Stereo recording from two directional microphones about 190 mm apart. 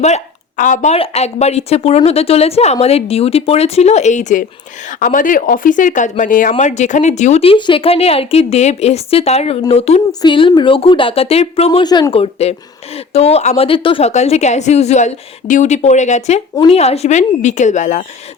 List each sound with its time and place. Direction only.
0.0 s speech: 40° left (ahead or behind)
10.1 s speech: 20° left (ahead or behind); by 18.0 s 40° left (ahead or behind)